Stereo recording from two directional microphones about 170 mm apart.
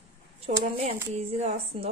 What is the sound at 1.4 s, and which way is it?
Speech, 40° right (ahead or behind).